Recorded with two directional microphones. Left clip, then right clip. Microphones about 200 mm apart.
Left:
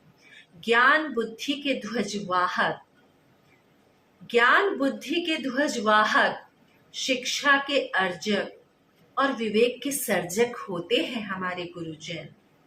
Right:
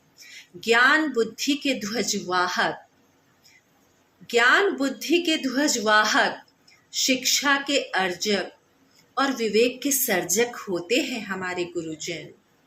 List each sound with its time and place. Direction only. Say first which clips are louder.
0.6 s a woman's voice: right 2 dB; 40° right (ahead or behind)
4.3 s a woman's voice: right 1 dB; 40° right (ahead or behind)